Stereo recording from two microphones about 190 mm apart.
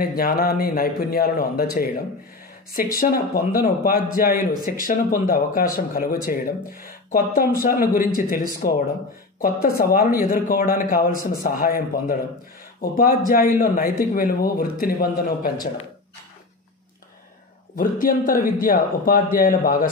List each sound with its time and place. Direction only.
0.0 s a man's voice: 50° left (ahead or behind)
3.0 s a man's voice: 50° left (ahead or behind)
17.7 s a man's voice: 45° left (ahead or behind)